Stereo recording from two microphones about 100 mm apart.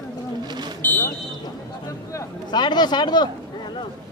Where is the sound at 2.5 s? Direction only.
45° left (ahead or behind).